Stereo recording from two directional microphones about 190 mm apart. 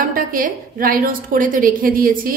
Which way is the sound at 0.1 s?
45° right (ahead or behind).